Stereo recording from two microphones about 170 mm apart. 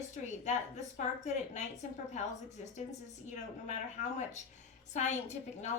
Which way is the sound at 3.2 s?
45° left (ahead or behind).